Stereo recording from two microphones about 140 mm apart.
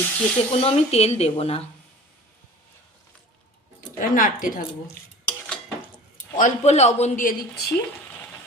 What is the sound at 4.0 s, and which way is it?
Speech, 80° left.